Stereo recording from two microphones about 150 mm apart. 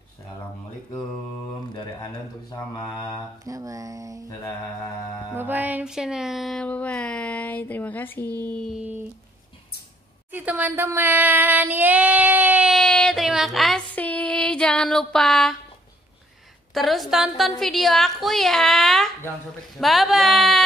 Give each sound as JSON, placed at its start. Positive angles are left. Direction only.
{"t": 1.7, "sound": "speech", "side_deg": 30}
{"t": 3.4, "sound": "mantra", "side_deg": -20}
{"t": 4.3, "sound": "mantra", "side_deg": 20}
{"t": 5.3, "sound": "music", "side_deg": -15}
{"t": 10.3, "sound": "child singing", "side_deg": -10}
{"t": 12.7, "sound": "female singing", "side_deg": 5}
{"t": 16.7, "sound": "a woman's voice", "side_deg": 0}